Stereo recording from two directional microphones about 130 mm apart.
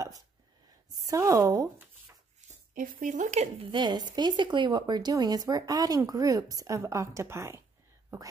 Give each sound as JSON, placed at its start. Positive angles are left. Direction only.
{"t": 1.0, "sound": "speech", "side_deg": -20}
{"t": 2.7, "sound": "speech", "side_deg": -90}
{"t": 3.5, "sound": "speech", "side_deg": -35}